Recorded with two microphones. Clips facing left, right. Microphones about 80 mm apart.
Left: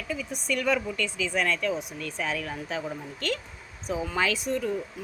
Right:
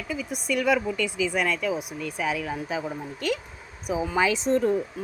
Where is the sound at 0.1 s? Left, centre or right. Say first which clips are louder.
Right 2 dB; centre.